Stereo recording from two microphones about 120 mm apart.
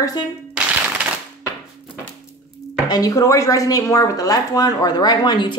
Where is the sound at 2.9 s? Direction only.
30° left (ahead or behind).